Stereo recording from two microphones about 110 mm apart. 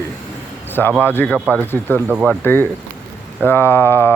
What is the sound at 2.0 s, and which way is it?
Speech, 10° right (ahead or behind).